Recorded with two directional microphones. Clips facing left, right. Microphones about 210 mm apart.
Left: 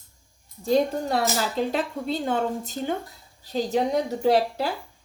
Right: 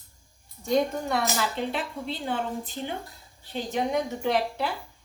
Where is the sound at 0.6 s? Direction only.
35° left (ahead or behind).